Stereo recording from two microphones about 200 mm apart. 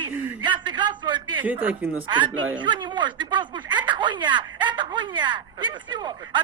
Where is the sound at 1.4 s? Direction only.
10° right (ahead or behind).